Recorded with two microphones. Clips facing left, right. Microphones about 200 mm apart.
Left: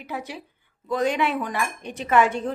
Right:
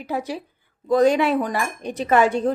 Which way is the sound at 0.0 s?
40° right (ahead or behind).